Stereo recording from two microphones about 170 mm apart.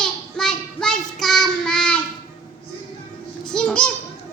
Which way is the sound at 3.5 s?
5° left (ahead or behind).